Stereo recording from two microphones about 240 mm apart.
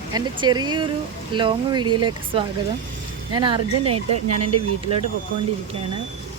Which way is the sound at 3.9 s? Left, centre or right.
Right.